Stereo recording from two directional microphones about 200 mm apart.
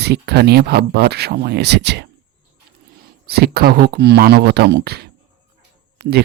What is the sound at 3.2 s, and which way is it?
Speech, 50° right (ahead or behind).